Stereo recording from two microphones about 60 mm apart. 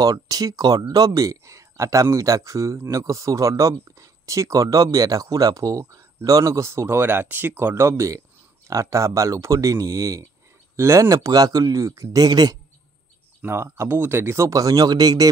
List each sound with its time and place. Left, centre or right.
0.0 s speech: right
10.8 s speech: right
11.1 s speech: right
13.5 s speech: right
14.5 s speech: right